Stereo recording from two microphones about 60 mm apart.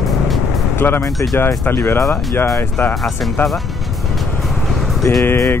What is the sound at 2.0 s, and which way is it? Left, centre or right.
Speech, left.